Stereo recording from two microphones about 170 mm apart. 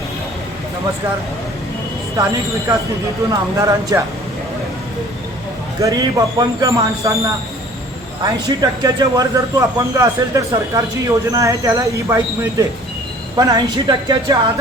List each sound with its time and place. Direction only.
2.1 s speech: 20° right (ahead or behind)
5.8 s speech: 25° right (ahead or behind)